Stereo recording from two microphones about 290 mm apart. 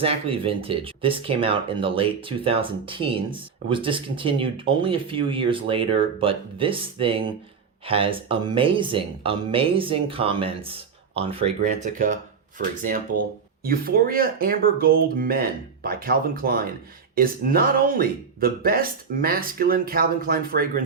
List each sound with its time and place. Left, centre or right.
0.0 s speech: centre